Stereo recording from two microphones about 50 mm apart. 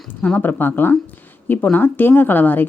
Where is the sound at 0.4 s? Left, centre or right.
Left.